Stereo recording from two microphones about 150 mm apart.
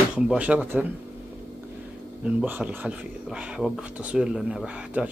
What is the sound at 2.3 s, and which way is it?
Speech, 10° right (ahead or behind).